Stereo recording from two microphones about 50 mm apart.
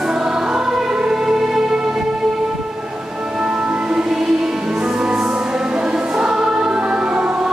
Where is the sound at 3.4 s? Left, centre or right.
Centre.